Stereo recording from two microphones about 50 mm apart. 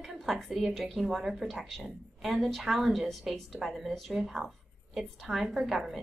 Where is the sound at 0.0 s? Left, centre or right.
Centre.